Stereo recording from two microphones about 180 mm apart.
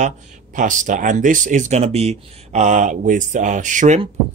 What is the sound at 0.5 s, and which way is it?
Speech, 45° right (ahead or behind).